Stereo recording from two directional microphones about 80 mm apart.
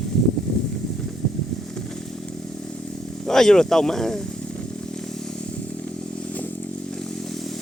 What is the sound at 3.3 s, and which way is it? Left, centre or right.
Speech, centre.